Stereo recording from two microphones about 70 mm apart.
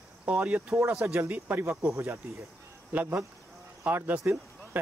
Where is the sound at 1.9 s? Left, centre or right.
Right.